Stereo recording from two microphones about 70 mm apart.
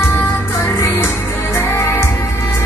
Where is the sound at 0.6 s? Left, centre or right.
Left.